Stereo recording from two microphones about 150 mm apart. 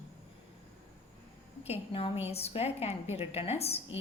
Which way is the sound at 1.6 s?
40° left (ahead or behind).